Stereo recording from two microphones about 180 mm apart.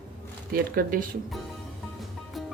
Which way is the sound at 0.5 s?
50° right (ahead or behind).